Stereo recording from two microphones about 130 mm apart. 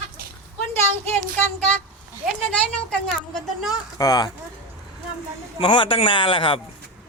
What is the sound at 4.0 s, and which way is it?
Speech, 25° left (ahead or behind).